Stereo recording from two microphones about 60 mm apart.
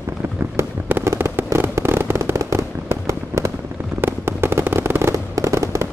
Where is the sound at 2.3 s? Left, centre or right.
Right.